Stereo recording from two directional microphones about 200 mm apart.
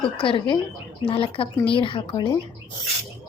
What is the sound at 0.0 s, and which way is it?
Speech, 25° left (ahead or behind).